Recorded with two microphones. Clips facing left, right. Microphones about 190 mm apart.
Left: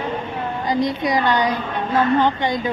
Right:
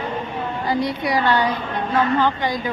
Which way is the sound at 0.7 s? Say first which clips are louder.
Left 2 dB; 20° left (ahead or behind).